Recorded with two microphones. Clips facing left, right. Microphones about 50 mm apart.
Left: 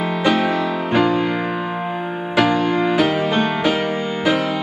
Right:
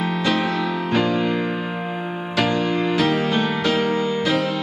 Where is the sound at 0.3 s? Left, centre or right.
Centre.